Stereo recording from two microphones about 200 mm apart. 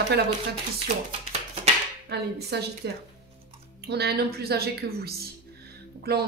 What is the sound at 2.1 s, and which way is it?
A woman's voice, 55° right (ahead or behind).